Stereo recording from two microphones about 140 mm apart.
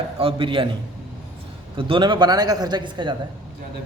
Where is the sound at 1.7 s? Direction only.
40° right (ahead or behind).